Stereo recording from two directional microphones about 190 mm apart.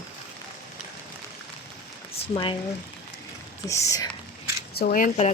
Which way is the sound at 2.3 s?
25° left (ahead or behind).